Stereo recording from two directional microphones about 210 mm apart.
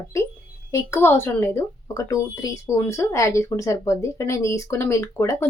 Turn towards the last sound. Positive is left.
turn(degrees=15)  # may be behind; listen again after turning